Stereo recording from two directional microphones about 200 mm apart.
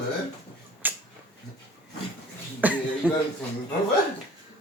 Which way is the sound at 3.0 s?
5° right (ahead or behind).